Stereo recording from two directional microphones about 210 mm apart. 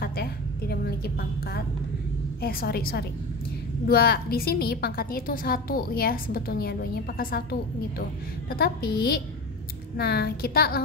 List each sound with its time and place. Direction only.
0.0 s a sound: 45° left (ahead or behind)
2.4 s a woman's voice: 45° left (ahead or behind)
8.5 s a woman's voice: 45° left (ahead or behind)